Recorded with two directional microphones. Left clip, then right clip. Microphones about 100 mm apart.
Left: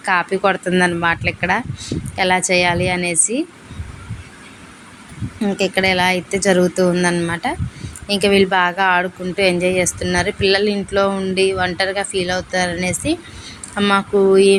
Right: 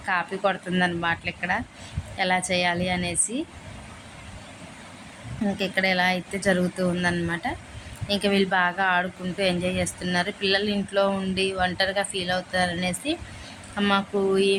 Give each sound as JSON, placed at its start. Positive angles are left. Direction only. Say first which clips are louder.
{"t": 0.0, "sound": "a woman's voice", "louder": "left 8 dB", "side_deg": 40}
{"t": 5.5, "sound": "speech", "louder": "left 7 dB", "side_deg": 25}